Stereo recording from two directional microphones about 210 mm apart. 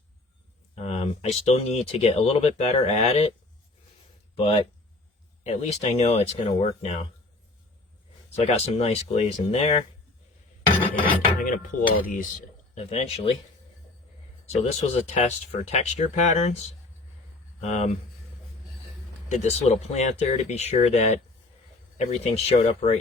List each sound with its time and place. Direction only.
0.9 s speech: 30° left (ahead or behind)
4.4 s speech: 25° left (ahead or behind)
8.4 s speech: 30° left (ahead or behind)
11.3 s a sound: 40° left (ahead or behind)
12.0 s speech: 40° left (ahead or behind)
14.5 s speech: 30° left (ahead or behind)
19.3 s speech: 30° left (ahead or behind)